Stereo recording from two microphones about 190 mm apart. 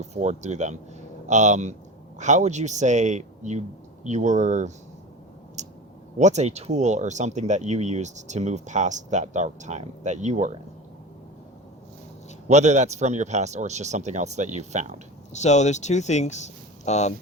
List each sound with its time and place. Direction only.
0.0 s speech: 35° right (ahead or behind)
5.6 s clicking: 40° right (ahead or behind)
6.1 s speech: 35° right (ahead or behind)
12.5 s speech: 35° right (ahead or behind)
15.3 s speech: 35° left (ahead or behind)